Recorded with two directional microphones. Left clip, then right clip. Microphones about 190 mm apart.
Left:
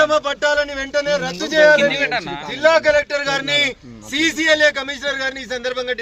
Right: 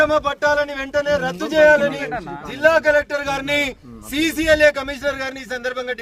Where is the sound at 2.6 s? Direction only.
30° right (ahead or behind).